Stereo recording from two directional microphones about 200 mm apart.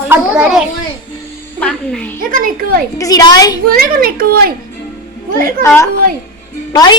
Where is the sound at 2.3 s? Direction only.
45° right (ahead or behind).